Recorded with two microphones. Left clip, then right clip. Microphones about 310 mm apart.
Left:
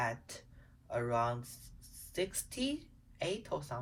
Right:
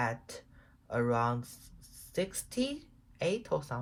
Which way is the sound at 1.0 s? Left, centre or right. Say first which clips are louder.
Right 2 dB; centre.